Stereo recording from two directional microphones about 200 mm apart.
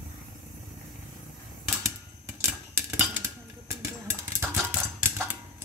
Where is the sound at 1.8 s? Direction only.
15° right (ahead or behind).